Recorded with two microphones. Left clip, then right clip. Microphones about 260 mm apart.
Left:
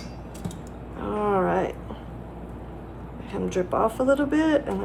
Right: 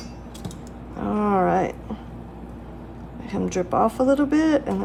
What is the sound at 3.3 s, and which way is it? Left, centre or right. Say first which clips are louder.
Speech: right 2 dB; right.